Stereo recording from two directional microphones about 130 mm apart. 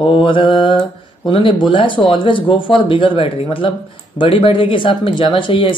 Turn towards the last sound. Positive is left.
turn(degrees=40)  # may be behind; listen again after turning